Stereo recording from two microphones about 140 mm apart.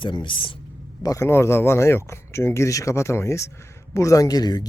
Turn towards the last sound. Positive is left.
turn(degrees=30)  # may be behind; listen again after turning